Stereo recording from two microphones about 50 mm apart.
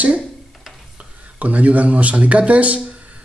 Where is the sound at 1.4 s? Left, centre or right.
Right.